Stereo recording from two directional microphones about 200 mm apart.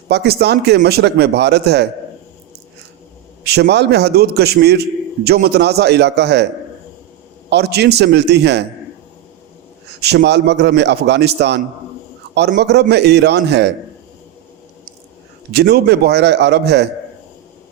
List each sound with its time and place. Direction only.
0.1 s a man's voice: 55° right (ahead or behind)
3.4 s a man's voice: 55° right (ahead or behind)
7.5 s a man's voice: 55° right (ahead or behind)
10.0 s a man's voice: 55° right (ahead or behind)
15.5 s a man's voice: 55° right (ahead or behind)